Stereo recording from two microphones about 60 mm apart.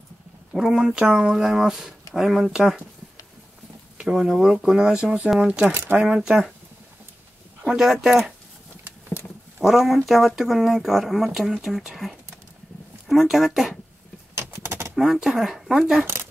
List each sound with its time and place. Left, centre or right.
0.5 s speech: centre
4.1 s speech: centre
7.6 s speech: centre
9.6 s speech: centre
14.3 s a sound: right
15.0 s speech: centre